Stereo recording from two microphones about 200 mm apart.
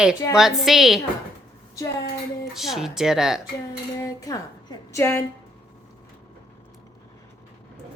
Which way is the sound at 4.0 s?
15° left (ahead or behind).